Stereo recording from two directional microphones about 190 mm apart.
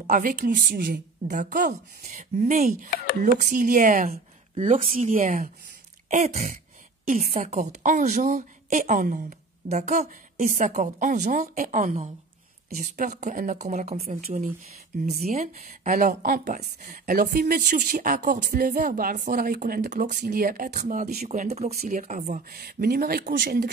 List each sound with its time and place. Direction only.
0.0 s a woman's voice: 45° right (ahead or behind)